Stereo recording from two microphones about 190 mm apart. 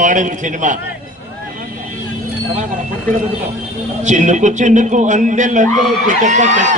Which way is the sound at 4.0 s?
40° right (ahead or behind).